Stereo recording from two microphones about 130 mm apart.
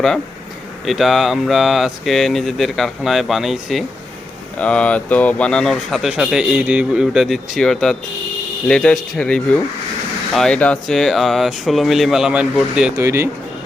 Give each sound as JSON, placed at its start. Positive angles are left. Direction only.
{"t": 0.9, "sound": "speech", "side_deg": 0}
{"t": 13.0, "sound": "speech", "side_deg": -20}